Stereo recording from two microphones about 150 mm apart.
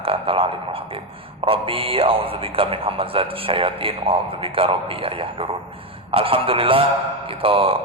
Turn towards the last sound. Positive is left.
turn(degrees=-35)  # may be behind; listen again after turning